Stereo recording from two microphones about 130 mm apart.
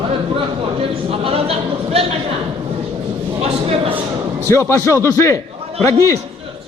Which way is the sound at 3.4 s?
50° right (ahead or behind).